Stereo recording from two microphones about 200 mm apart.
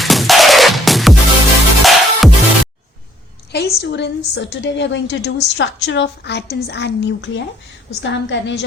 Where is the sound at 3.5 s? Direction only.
55° left (ahead or behind).